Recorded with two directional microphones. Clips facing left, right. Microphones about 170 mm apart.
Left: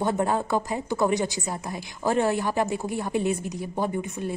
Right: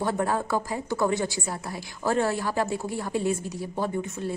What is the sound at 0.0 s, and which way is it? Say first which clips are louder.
A woman's voice: left 2 dB; 20° left (ahead or behind).